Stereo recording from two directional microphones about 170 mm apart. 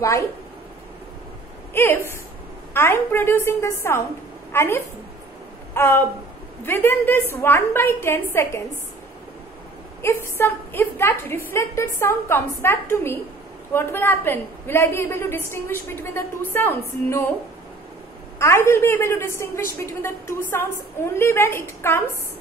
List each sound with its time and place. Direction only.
1.7 s a woman's voice: 15° left (ahead or behind)
10.0 s a woman's voice: 15° left (ahead or behind)
18.4 s a woman's voice: 15° left (ahead or behind)